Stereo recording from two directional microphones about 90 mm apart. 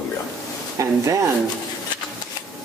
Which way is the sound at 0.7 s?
35° right (ahead or behind).